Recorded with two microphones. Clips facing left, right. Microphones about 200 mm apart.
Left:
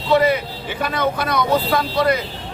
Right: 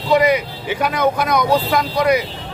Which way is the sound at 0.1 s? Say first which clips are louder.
Right 1 dB; 15° right (ahead or behind).